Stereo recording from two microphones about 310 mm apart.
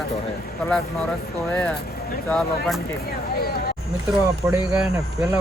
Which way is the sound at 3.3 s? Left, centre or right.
Left.